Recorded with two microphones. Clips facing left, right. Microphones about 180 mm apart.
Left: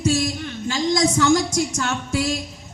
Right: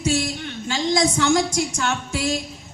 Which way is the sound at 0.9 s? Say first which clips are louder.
Left 1 dB; 40° left (ahead or behind).